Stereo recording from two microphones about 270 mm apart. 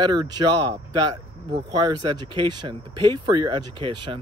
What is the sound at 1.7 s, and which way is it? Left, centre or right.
Speech, centre.